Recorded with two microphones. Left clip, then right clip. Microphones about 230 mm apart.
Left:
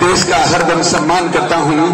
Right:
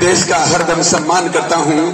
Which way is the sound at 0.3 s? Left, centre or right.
Right.